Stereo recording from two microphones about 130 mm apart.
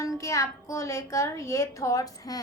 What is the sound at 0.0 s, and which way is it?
A woman's voice, 25° left (ahead or behind).